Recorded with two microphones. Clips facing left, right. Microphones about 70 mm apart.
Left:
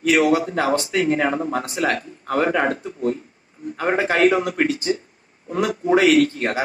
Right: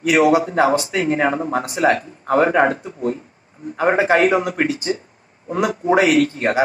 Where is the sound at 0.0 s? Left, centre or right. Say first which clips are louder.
Right 3 dB; right.